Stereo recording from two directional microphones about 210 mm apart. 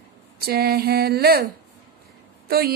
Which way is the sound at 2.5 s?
45° right (ahead or behind).